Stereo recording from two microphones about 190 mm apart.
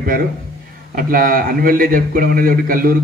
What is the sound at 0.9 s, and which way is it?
A man's voice, 50° right (ahead or behind).